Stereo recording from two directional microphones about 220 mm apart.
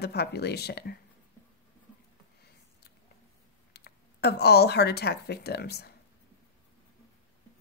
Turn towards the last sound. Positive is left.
turn(degrees=50)  # may be behind; listen again after turning